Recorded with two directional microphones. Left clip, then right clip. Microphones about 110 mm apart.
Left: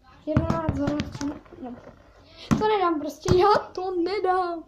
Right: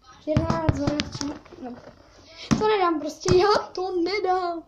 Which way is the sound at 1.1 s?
10° right (ahead or behind).